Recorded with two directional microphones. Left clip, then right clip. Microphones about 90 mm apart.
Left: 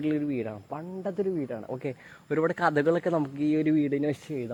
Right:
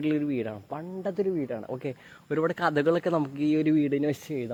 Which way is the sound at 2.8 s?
5° right (ahead or behind).